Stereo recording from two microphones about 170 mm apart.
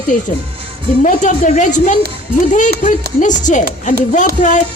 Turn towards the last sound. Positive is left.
turn(degrees=50)  # may be behind; listen again after turning